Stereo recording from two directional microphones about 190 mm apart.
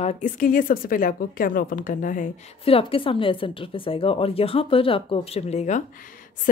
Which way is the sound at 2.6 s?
30° left (ahead or behind).